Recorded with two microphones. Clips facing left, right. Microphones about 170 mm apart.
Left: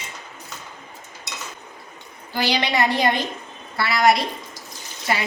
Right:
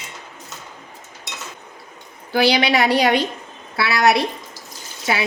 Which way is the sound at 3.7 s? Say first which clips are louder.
Right 1 dB; 70° right (ahead or behind).